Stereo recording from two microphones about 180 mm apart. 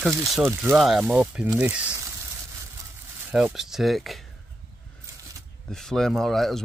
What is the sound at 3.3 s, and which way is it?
Speech, 5° right (ahead or behind).